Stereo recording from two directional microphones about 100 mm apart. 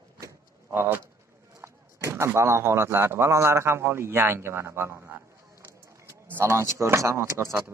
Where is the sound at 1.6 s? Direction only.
30° right (ahead or behind).